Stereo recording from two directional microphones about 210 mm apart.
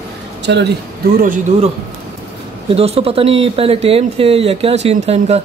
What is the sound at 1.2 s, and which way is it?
Speech, 40° right (ahead or behind).